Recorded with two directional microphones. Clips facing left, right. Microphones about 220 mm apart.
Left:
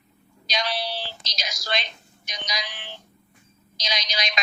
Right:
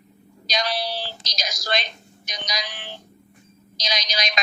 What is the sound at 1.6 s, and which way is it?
A woman's voice, 40° right (ahead or behind).